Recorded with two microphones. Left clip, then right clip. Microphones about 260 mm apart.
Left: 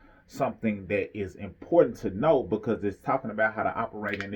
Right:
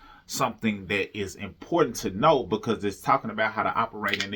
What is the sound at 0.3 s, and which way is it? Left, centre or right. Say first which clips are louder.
Speech: right 2 dB; centre.